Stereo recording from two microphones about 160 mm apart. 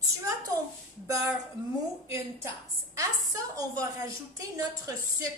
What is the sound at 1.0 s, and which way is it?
A woman's voice, 20° right (ahead or behind).